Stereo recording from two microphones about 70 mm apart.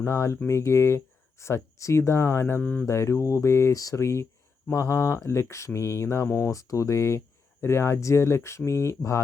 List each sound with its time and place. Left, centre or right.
0.0 s speech: left
2.6 s speech: left
2.8 s speech: left
6.5 s speech: left